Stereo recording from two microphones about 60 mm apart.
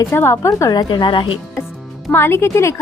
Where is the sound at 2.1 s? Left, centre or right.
Left.